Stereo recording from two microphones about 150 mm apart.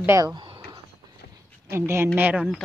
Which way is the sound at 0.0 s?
20° right (ahead or behind).